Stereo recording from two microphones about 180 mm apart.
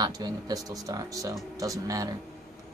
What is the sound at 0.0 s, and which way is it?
Speech, 20° right (ahead or behind).